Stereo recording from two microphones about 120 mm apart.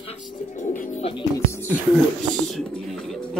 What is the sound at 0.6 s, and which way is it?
Speech, 85° left.